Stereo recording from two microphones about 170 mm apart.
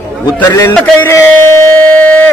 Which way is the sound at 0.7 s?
15° left (ahead or behind).